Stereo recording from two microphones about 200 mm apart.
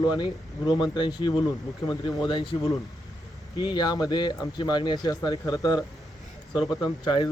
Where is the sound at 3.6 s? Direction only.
20° left (ahead or behind).